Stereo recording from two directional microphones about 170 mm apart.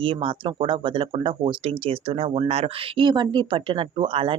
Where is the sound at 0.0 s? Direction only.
30° right (ahead or behind).